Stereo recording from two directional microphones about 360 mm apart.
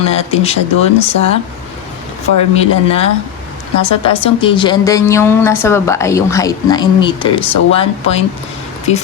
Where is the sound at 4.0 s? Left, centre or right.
Centre.